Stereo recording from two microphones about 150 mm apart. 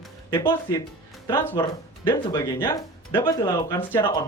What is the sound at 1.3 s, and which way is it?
Speech, 15° left (ahead or behind).